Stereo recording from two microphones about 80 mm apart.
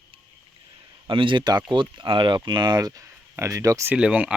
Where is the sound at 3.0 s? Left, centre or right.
Right.